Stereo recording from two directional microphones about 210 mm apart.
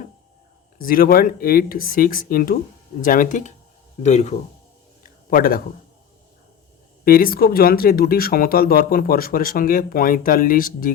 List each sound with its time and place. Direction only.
0.8 s speech: 45° left (ahead or behind)
5.0 s a sound: 45° left (ahead or behind)
7.0 s speech: 45° left (ahead or behind)